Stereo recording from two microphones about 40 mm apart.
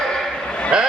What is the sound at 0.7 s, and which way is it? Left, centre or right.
Speech, centre.